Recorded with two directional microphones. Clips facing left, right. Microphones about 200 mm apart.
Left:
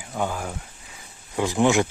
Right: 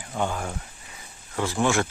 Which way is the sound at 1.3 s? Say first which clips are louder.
Left 4 dB; 15° left (ahead or behind).